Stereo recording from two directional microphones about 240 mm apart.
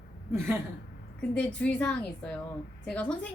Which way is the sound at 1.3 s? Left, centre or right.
Centre.